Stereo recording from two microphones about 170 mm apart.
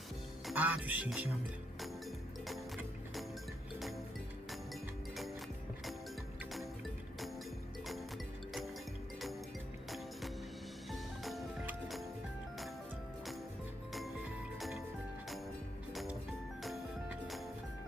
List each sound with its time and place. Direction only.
0.4 s speech: 10° right (ahead or behind)
1.8 s music: centre (ahead or behind)
3.8 s music: centre (ahead or behind)
10.9 s music: centre (ahead or behind)